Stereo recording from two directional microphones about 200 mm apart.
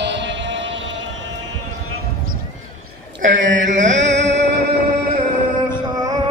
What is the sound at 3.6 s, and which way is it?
Mantra, 40° right (ahead or behind).